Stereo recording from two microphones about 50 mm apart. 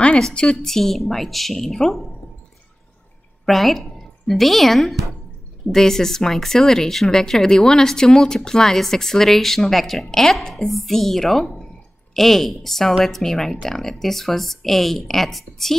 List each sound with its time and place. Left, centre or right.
0.3 s a woman's voice: left
0.7 s speech: centre
3.4 s a woman's voice: centre